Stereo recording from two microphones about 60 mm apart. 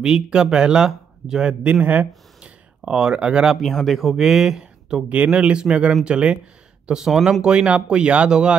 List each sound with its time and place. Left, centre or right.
0.0 s speech: centre
2.8 s speech: centre
3.6 s speech: centre
7.4 s speech: centre